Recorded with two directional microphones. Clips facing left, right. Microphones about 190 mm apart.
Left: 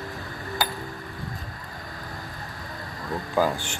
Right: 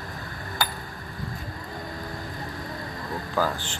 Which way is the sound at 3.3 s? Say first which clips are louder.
Left 3 dB; 15° left (ahead or behind).